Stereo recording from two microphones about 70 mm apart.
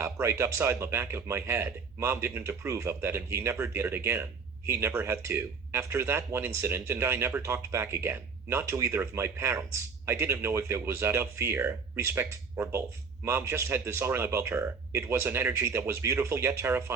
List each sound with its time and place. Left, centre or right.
0.0 s speech: right